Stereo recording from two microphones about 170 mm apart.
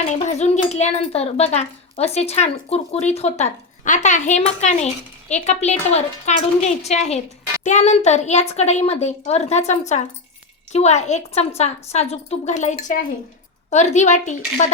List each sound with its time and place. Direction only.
0.1 s a child's voice: 40° left (ahead or behind)